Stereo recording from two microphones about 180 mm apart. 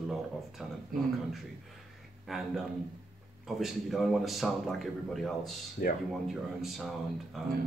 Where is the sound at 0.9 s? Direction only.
50° right (ahead or behind).